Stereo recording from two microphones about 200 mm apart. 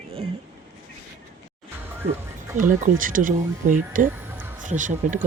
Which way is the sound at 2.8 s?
40° right (ahead or behind).